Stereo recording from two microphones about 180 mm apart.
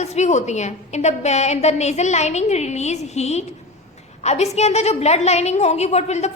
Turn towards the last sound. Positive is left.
turn(degrees=35)  # may be behind; listen again after turning